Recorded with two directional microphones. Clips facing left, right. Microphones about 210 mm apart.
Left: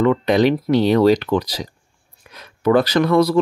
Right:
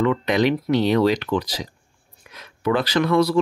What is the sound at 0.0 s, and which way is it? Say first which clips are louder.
Speech: left 4 dB; 35° left (ahead or behind).